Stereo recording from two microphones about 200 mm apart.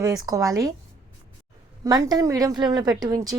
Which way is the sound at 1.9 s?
20° right (ahead or behind).